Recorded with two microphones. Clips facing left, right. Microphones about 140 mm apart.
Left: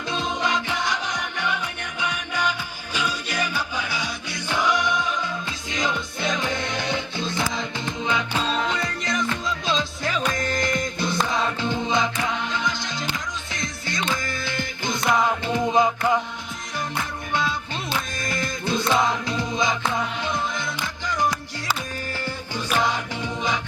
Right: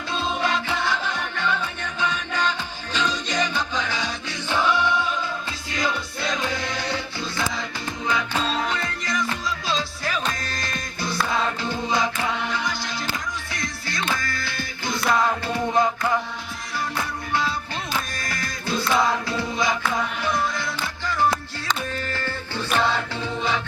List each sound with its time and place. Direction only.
0.1 s music: 20° left (ahead or behind)